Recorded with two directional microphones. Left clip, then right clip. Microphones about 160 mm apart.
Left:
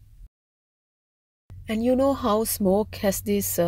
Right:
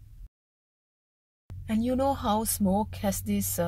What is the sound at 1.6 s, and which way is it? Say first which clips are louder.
Speech: left 5 dB; 35° left (ahead or behind).